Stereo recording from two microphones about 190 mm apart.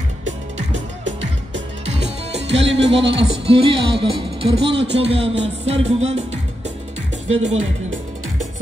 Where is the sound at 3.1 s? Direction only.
65° right (ahead or behind).